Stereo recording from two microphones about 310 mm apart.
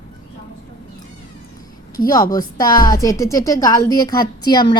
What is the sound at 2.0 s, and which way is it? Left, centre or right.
A woman's voice, centre.